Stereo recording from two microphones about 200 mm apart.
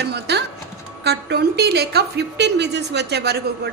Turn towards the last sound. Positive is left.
turn(degrees=-55)  # may be behind; listen again after turning